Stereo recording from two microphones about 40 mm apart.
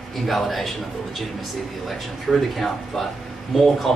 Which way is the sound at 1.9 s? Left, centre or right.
Centre.